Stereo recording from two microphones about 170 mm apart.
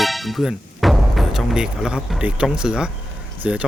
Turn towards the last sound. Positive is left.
turn(degrees=-5)  # may be behind; listen again after turning